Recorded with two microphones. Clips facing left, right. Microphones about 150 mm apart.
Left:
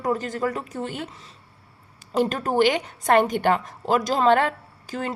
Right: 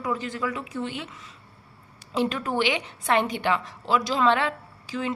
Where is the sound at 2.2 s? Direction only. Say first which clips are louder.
Left 4 dB; 45° left (ahead or behind).